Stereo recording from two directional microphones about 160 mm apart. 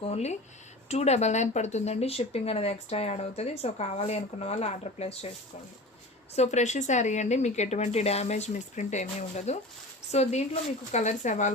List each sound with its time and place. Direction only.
0.0 s speech: 40° left (ahead or behind)
6.3 s speech: 45° left (ahead or behind)